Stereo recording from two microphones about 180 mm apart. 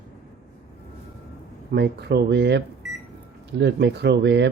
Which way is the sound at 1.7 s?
65° right (ahead or behind).